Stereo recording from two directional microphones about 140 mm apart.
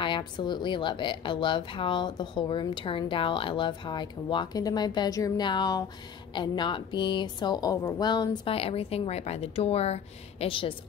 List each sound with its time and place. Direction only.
0.0 s a woman's voice: 35° left (ahead or behind)